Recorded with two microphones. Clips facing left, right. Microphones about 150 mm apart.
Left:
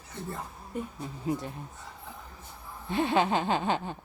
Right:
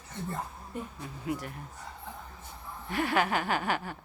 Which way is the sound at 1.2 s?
30° left (ahead or behind).